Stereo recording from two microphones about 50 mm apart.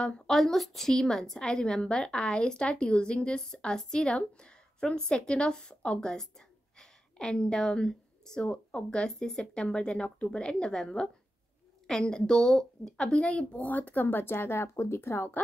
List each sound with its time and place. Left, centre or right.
0.3 s a woman's voice: centre; by 15.3 s left